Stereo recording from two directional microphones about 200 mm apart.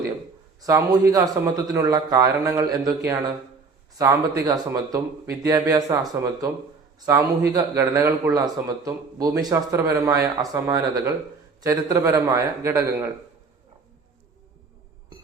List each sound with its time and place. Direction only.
0.6 s a man's voice: 15° right (ahead or behind)